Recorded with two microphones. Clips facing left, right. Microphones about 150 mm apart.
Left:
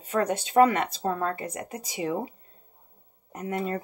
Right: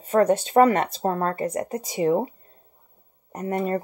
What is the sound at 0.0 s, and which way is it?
Speech, 40° right (ahead or behind).